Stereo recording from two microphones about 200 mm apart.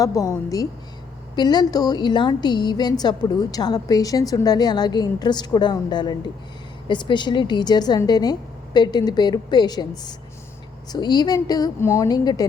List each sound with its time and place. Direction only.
0.0 s a woman's voice: 15° left (ahead or behind)